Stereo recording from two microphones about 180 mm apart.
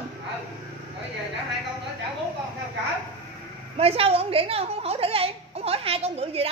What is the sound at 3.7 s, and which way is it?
A woman's voice, 35° right (ahead or behind).